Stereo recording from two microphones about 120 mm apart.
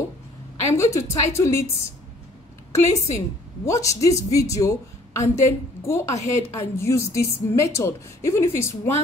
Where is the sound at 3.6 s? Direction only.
25° left (ahead or behind).